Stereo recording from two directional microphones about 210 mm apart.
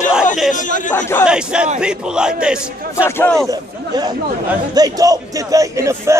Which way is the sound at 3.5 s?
20° right (ahead or behind).